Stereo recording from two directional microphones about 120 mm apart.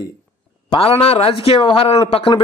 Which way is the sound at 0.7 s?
50° left (ahead or behind).